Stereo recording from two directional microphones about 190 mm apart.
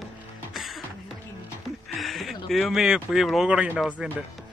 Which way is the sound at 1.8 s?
Centre (ahead or behind).